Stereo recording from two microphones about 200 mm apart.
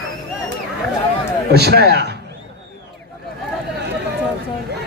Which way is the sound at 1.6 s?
55° right (ahead or behind).